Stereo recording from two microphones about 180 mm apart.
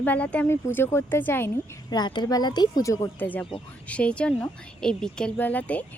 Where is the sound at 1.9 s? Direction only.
25° left (ahead or behind).